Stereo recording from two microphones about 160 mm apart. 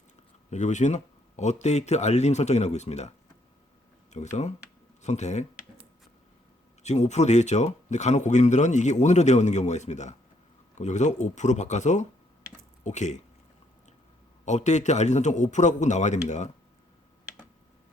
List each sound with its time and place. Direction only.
0.5 s speech: 45° left (ahead or behind)
6.8 s speech: 45° left (ahead or behind)
14.4 s speech: 45° left (ahead or behind)